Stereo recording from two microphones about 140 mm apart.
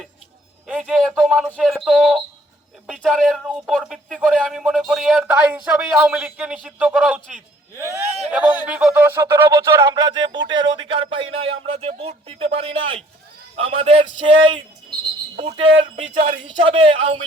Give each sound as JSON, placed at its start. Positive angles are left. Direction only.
{"t": 0.7, "sound": "speech", "side_deg": -5}
{"t": 8.3, "sound": "a man's voice", "side_deg": -10}